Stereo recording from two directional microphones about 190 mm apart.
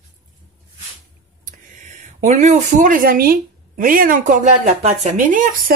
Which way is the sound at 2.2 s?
35° right (ahead or behind).